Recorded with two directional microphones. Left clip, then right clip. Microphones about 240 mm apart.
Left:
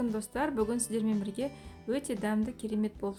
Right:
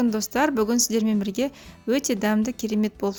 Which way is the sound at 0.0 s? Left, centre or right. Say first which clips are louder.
Right 10 dB; right.